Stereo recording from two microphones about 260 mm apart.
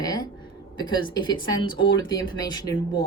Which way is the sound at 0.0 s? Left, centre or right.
Centre.